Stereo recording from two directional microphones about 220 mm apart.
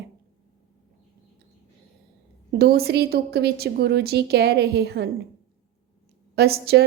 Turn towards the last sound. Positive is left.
turn(degrees=-45)  # may be behind; listen again after turning